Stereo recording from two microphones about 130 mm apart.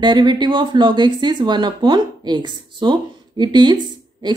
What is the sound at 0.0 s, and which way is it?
Speech, 35° right (ahead or behind).